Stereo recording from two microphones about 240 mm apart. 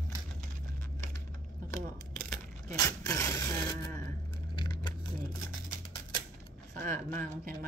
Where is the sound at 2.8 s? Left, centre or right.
Centre.